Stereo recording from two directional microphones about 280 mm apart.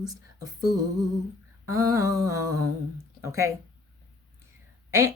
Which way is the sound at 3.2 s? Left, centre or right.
Centre.